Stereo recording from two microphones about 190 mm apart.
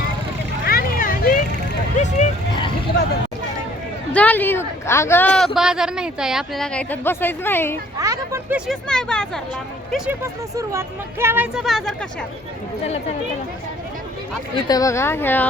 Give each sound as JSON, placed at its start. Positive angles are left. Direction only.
{"t": 0.6, "sound": "vehicle", "side_deg": 50}
{"t": 2.0, "sound": "a sound", "side_deg": 40}
{"t": 4.1, "sound": "a sound", "side_deg": 10}
{"t": 5.5, "sound": "speech", "side_deg": -5}
{"t": 7.9, "sound": "speech", "side_deg": -15}
{"t": 10.1, "sound": "speech", "side_deg": -15}
{"t": 14.5, "sound": "speech", "side_deg": 20}